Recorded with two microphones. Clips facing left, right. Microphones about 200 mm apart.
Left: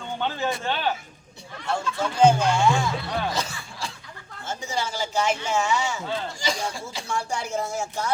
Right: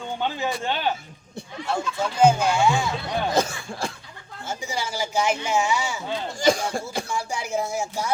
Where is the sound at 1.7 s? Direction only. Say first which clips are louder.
Even; 5° right (ahead or behind).